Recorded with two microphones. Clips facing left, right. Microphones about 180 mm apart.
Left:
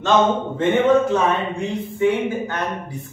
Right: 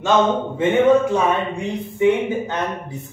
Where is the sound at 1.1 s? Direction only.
15° right (ahead or behind).